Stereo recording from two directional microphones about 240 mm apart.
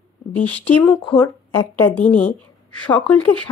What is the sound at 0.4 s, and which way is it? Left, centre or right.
A woman's voice, centre.